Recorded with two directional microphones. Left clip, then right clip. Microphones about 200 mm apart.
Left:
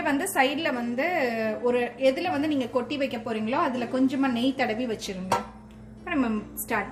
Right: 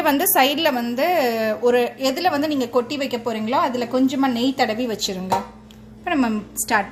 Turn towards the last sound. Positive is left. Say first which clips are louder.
# right 8 dB
turn(degrees=-45)  # may be behind; listen again after turning